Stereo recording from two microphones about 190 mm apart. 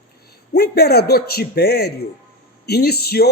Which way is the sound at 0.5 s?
55° left (ahead or behind).